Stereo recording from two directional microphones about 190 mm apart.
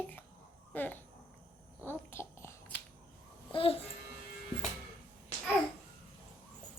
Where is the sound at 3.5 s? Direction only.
30° left (ahead or behind).